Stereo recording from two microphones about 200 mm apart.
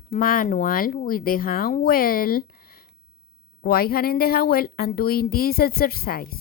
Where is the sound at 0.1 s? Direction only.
45° left (ahead or behind).